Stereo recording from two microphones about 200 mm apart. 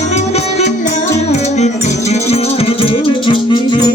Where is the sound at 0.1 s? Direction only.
35° left (ahead or behind).